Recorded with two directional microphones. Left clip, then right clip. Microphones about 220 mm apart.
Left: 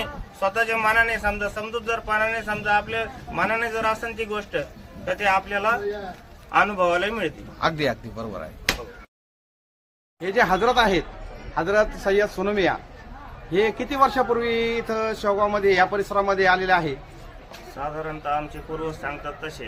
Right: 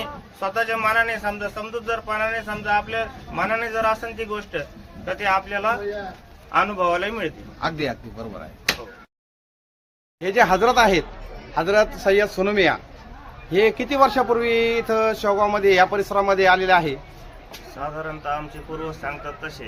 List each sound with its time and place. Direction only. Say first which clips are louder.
0.0 s a man's voice: left 2 dB; centre (ahead or behind)
7.6 s a man's voice: left 2 dB; 30° left (ahead or behind)
10.2 s speech: right 3 dB; 20° right (ahead or behind)
17.7 s a man's voice: even; centre (ahead or behind)